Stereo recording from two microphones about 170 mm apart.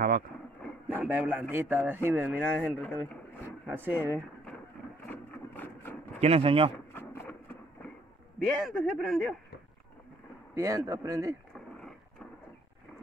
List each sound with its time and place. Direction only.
0.8 s a man's voice: 10° right (ahead or behind)
1.5 s rub: 10° right (ahead or behind)
2.8 s speech: 10° left (ahead or behind)
3.7 s rub: 10° right (ahead or behind)
5.0 s engine: 10° left (ahead or behind)
6.1 s speech: 35° right (ahead or behind)
6.9 s vehicle: 15° left (ahead or behind)
8.6 s speech: centre (ahead or behind)
10.5 s a man's voice: 15° right (ahead or behind)